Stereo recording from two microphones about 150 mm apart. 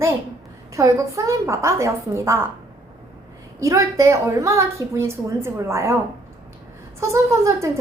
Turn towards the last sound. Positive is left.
turn(degrees=-20)  # may be behind; listen again after turning